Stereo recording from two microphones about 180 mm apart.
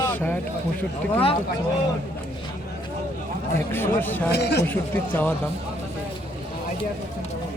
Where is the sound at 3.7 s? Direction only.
10° left (ahead or behind).